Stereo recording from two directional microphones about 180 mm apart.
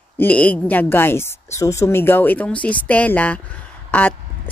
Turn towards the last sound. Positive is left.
turn(degrees=10)  # may be behind; listen again after turning